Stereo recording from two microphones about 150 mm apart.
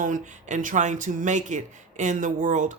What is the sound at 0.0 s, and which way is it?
Speech, 55° right (ahead or behind).